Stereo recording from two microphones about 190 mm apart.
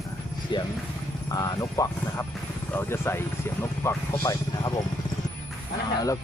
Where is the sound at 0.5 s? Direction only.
25° left (ahead or behind).